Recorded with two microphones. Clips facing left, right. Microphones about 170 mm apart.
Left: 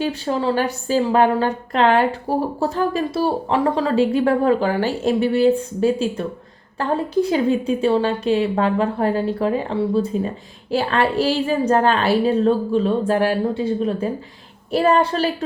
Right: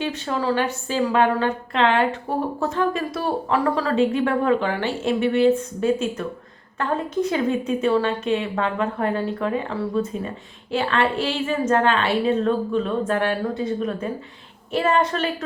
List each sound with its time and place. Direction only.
0.0 s speech: 30° left (ahead or behind)